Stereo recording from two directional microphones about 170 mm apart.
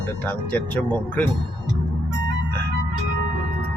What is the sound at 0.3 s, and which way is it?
Speech, 10° left (ahead or behind).